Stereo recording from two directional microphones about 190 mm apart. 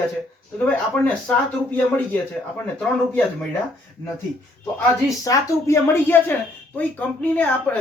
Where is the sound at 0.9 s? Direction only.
10° left (ahead or behind).